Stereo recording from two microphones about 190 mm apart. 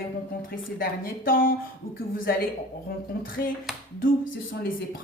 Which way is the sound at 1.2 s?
50° left (ahead or behind).